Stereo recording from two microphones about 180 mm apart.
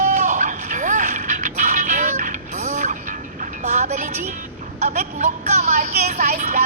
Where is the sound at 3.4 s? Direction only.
40° right (ahead or behind).